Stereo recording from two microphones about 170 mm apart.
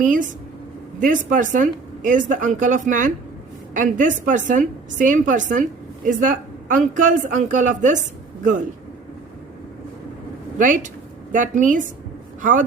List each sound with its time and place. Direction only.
0.0 s speech: 50° right (ahead or behind)
10.6 s a woman's voice: 50° right (ahead or behind)